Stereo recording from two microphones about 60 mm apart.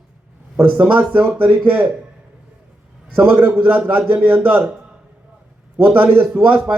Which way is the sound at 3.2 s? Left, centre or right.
Right.